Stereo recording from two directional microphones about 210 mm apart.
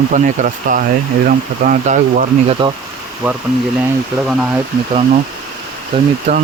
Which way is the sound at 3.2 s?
5° right (ahead or behind).